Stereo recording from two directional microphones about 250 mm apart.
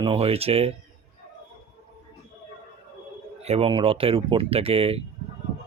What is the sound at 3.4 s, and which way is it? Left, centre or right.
Speech, right.